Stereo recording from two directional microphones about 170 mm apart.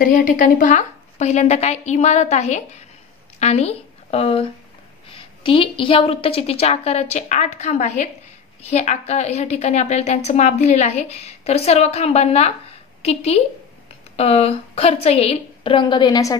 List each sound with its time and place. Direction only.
0.0 s a woman's voice: 50° left (ahead or behind); by 16.3 s 20° left (ahead or behind)